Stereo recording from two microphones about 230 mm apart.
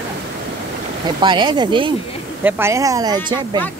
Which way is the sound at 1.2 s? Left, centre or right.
Centre.